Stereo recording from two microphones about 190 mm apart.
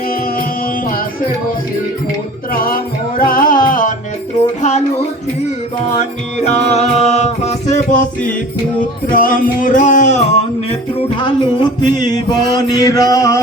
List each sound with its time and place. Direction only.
0.1 s music: 50° left (ahead or behind)
2.5 s music: 50° left (ahead or behind); by 13.4 s 15° left (ahead or behind)